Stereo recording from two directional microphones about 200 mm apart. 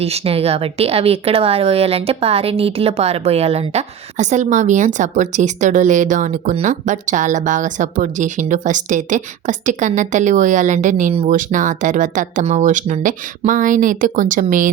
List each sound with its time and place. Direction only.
0.0 s speech: 30° right (ahead or behind)